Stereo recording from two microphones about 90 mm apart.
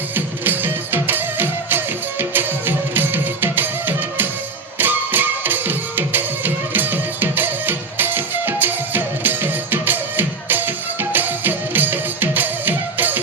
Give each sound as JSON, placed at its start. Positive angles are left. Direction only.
{"t": 0.1, "sound": "music", "side_deg": -20}